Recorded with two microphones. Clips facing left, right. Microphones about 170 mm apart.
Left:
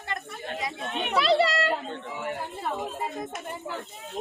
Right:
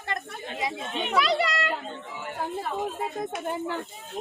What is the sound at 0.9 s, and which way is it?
Speech, centre (ahead or behind).